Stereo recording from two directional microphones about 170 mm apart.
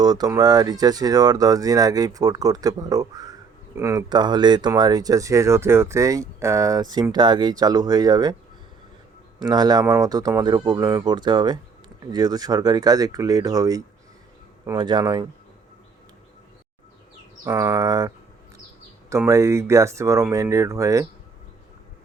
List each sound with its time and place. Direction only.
0.0 s speech: 25° right (ahead or behind)
9.4 s speech: 25° right (ahead or behind)
17.4 s speech: 15° right (ahead or behind)
19.1 s speech: 15° right (ahead or behind)